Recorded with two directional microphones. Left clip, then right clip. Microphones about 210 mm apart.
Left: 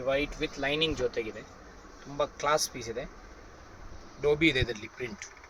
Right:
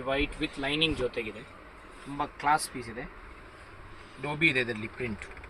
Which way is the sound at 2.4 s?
45° left (ahead or behind).